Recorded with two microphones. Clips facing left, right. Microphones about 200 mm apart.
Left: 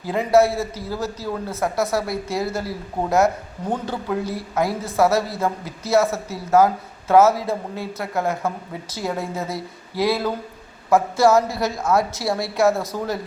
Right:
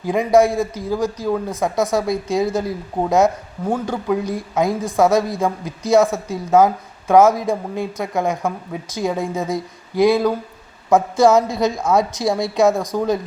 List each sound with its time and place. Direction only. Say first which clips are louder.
0.0 s a man's voice: right 2 dB; 15° right (ahead or behind)